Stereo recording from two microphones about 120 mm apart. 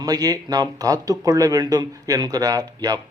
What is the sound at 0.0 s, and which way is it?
A man's voice, 30° right (ahead or behind).